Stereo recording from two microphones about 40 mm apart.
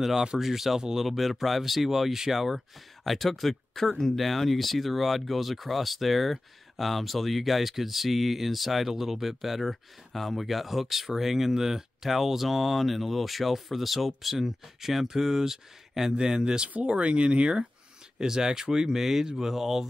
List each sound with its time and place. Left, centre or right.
0.0 s speech: centre
1.0 s speech: centre; by 17.6 s right
18.2 s speech: centre